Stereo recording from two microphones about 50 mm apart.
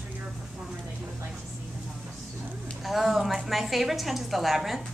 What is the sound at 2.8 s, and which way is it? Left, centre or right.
A woman's voice, centre.